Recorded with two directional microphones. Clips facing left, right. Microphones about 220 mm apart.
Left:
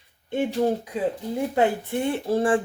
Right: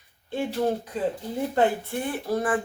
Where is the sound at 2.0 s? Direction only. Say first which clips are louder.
Left 5 dB; 25° left (ahead or behind).